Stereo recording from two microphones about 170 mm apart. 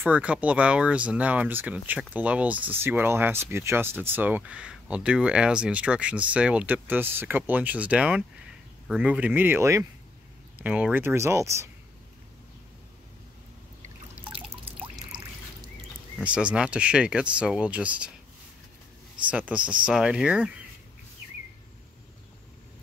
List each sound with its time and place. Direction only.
0.1 s speech: 10° right (ahead or behind)
14.7 s trickle: 35° right (ahead or behind)
16.2 s speech: 5° right (ahead or behind)
19.2 s speech: 10° right (ahead or behind)